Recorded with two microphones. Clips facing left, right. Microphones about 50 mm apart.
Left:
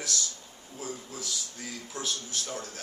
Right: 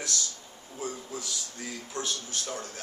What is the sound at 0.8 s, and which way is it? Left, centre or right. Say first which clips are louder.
A man's voice: right 2 dB; centre.